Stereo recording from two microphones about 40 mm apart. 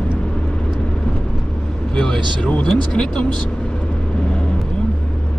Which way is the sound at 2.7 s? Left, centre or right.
Centre.